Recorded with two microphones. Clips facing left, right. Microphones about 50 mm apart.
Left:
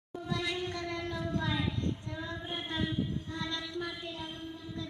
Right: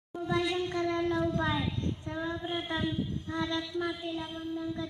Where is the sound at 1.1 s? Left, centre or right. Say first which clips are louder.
Right 5 dB; right.